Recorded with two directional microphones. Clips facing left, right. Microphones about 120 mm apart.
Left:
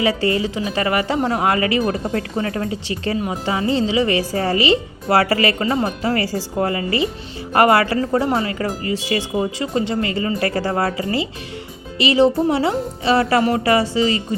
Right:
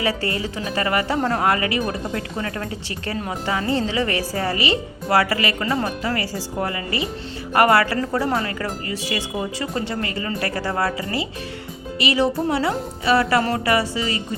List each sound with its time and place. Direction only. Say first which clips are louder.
0.0 s speech: left 5 dB; 20° left (ahead or behind)
3.2 s speech: right 1 dB; 15° left (ahead or behind)